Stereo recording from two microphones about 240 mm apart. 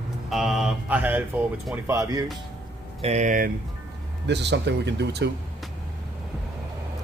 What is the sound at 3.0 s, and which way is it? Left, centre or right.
Speech, right.